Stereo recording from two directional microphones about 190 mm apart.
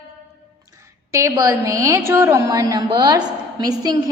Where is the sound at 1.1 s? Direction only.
15° right (ahead or behind).